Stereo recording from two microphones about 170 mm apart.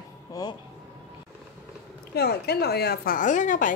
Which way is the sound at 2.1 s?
70° left (ahead or behind).